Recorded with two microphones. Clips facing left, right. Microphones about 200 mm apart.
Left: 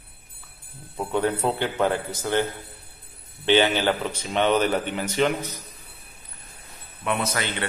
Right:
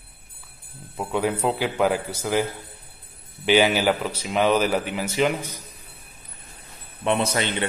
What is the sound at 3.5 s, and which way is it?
A man's voice, 10° right (ahead or behind).